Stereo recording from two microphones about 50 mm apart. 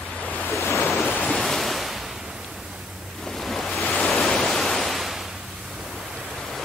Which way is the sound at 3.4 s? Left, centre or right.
Centre.